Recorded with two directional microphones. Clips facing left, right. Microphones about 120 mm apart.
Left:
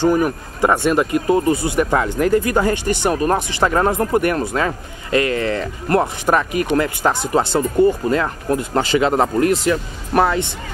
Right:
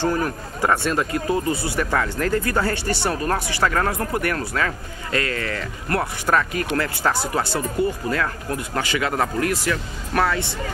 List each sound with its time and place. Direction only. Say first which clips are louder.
0.0 s speech: left 6 dB; 15° left (ahead or behind)